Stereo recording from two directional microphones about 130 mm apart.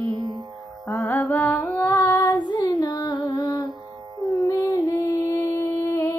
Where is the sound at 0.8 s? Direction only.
15° left (ahead or behind).